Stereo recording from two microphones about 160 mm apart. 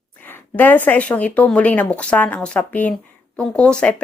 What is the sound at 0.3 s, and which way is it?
A woman's voice, 10° left (ahead or behind).